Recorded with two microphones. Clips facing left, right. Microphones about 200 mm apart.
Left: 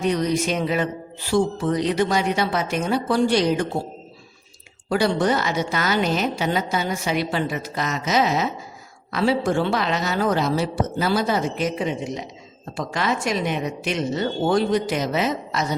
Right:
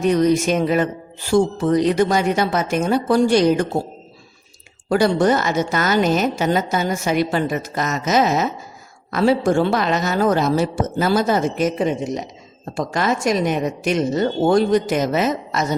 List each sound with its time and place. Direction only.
0.0 s speech: 50° right (ahead or behind)
4.9 s speech: 45° right (ahead or behind)